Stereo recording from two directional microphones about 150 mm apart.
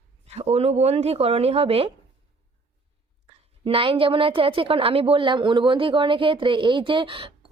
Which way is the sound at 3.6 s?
40° right (ahead or behind).